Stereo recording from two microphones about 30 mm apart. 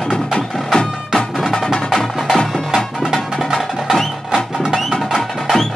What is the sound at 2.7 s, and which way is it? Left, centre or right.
Music, centre.